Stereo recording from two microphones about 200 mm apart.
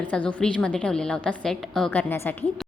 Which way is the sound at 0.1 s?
5° left (ahead or behind).